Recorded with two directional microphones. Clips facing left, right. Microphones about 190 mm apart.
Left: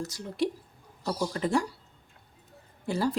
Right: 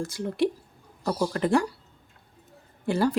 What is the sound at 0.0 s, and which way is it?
Speech, 55° right (ahead or behind).